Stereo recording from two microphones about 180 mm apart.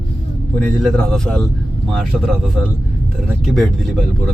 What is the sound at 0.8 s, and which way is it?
Speech, centre (ahead or behind).